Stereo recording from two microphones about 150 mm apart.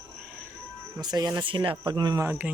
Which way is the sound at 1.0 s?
25° right (ahead or behind).